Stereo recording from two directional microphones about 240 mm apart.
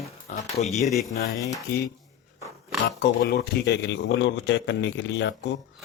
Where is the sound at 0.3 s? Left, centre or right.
Left.